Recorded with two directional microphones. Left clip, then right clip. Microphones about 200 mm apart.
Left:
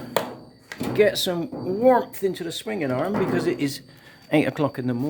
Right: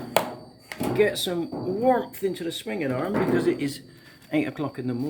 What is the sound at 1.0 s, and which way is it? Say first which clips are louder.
Speech: left 4 dB; 50° left (ahead or behind).